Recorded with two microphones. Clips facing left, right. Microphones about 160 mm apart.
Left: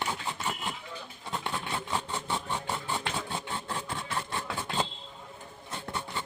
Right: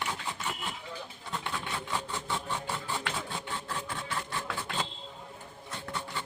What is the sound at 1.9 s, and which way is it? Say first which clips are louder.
Vehicle: left 1 dB; 25° left (ahead or behind).